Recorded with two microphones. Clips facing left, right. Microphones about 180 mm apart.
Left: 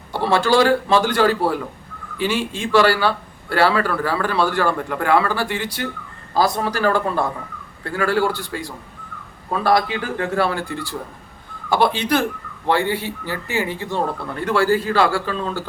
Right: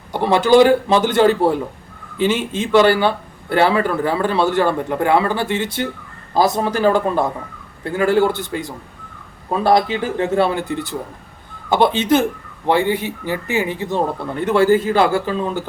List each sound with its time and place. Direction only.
0.1 s speech: 15° right (ahead or behind)